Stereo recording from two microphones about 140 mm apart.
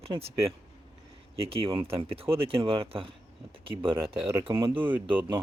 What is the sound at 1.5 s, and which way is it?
Speech, 40° right (ahead or behind).